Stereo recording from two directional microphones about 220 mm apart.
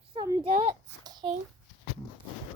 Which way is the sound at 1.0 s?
20° right (ahead or behind).